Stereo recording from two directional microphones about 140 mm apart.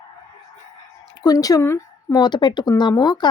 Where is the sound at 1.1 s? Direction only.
25° left (ahead or behind).